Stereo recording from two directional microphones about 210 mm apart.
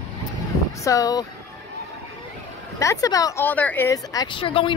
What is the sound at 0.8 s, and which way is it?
Speech, 15° left (ahead or behind).